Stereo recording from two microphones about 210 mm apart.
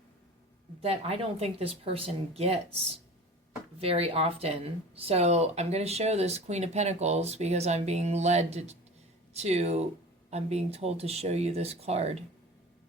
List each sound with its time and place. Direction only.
0.8 s speech: 30° right (ahead or behind)